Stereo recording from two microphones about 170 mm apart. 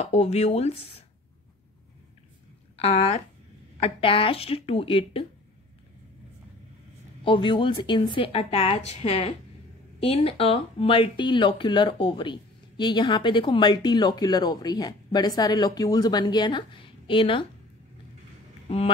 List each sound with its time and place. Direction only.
0.0 s a woman's voice: 40° left (ahead or behind)
2.8 s a woman's voice: 40° left (ahead or behind)
7.2 s a woman's voice: 30° left (ahead or behind)